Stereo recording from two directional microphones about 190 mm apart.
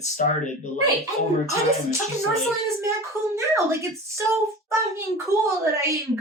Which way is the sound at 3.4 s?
15° right (ahead or behind).